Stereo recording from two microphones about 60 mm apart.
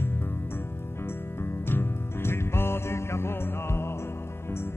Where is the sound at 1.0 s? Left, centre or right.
Left.